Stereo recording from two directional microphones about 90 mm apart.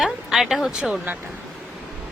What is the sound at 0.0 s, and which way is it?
Speech, 5° right (ahead or behind).